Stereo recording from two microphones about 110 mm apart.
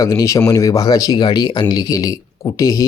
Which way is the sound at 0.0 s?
30° left (ahead or behind).